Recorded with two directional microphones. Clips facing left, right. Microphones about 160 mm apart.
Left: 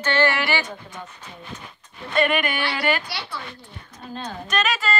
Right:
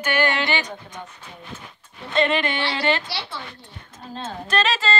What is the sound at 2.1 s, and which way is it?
Speech, 25° right (ahead or behind).